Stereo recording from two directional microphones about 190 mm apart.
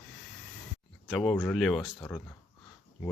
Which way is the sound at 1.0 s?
Centre (ahead or behind).